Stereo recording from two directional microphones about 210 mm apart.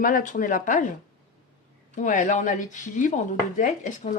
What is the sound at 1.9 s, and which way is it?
Speech, 40° left (ahead or behind).